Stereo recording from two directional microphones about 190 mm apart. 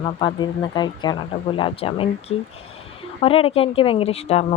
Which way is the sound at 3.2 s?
30° left (ahead or behind).